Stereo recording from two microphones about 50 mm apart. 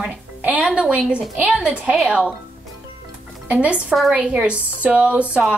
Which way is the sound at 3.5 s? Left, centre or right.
Right.